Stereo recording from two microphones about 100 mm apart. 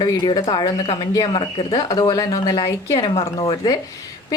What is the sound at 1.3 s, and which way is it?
Speech, 75° left (ahead or behind).